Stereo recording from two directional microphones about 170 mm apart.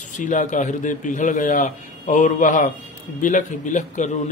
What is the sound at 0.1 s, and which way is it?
Speech, 50° left (ahead or behind).